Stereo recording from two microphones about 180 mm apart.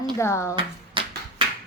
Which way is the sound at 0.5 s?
30° right (ahead or behind).